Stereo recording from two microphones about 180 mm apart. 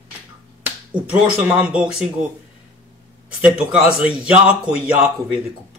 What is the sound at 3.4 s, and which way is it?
A man's voice, 5° right (ahead or behind).